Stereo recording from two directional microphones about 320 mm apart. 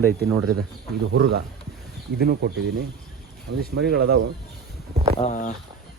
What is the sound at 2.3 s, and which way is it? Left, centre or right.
Speech, right.